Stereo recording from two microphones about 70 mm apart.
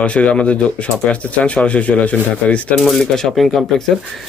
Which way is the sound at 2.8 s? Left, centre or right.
Centre.